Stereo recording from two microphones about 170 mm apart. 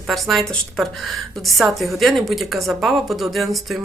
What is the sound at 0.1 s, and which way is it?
A woman's voice, centre (ahead or behind).